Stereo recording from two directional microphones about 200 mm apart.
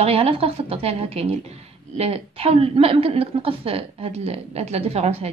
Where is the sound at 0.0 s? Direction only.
30° right (ahead or behind).